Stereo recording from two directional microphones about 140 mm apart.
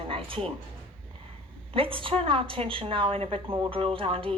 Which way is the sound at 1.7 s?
40° right (ahead or behind).